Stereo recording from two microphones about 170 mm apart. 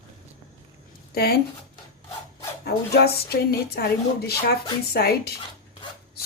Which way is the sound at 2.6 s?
65° left (ahead or behind).